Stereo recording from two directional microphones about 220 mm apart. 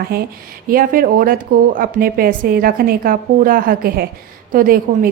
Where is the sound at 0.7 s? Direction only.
40° right (ahead or behind).